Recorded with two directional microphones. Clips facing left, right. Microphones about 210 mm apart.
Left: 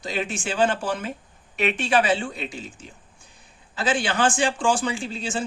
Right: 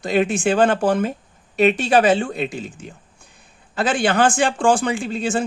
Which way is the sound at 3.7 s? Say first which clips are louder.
Right 5 dB; 55° right (ahead or behind).